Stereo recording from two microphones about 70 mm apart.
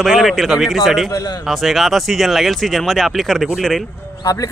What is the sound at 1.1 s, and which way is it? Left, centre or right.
Speech, left.